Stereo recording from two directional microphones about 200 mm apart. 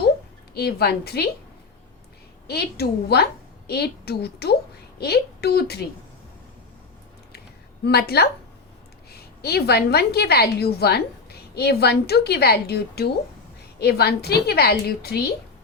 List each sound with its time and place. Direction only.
0.5 s a woman's voice: 55° left (ahead or behind)
2.5 s a woman's voice: 55° left (ahead or behind)
7.9 s a woman's voice: 50° left (ahead or behind)